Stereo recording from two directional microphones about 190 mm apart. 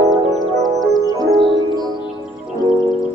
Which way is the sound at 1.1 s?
25° right (ahead or behind).